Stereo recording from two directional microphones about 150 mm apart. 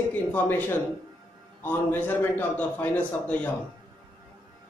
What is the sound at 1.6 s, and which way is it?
A man's voice, 10° left (ahead or behind).